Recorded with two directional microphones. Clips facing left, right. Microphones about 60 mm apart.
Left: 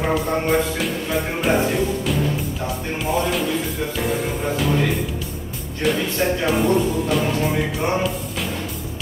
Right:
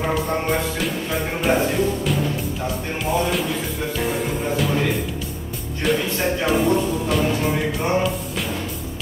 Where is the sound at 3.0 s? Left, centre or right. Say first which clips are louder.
Even; centre.